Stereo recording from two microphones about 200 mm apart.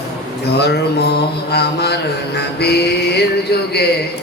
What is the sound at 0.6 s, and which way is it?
Mantra, 55° left (ahead or behind).